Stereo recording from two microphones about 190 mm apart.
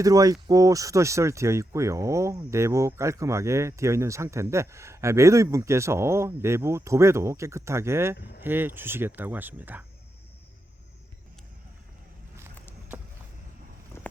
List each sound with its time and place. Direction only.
0.0 s speech: 20° right (ahead or behind)